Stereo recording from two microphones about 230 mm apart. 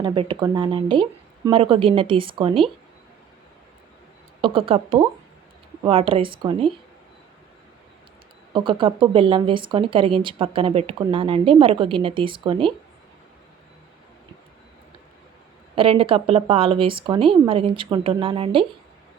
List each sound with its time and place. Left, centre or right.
0.0 s speech: right
4.4 s speech: right
8.5 s speech: right
15.7 s speech: right